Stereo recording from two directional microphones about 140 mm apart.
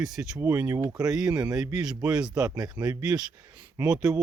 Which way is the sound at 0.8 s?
25° right (ahead or behind).